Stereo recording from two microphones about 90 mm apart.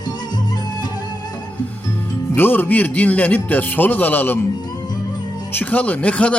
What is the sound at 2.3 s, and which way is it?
Speech, 20° left (ahead or behind).